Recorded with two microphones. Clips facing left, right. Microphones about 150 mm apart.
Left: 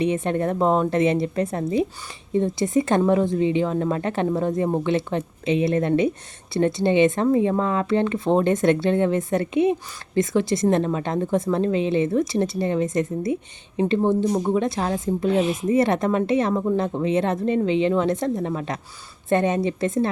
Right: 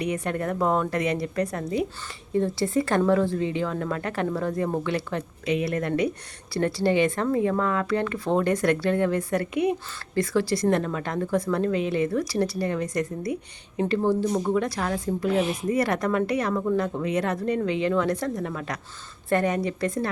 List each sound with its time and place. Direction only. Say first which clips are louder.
0.0 s a woman's voice: left 5 dB; 25° left (ahead or behind)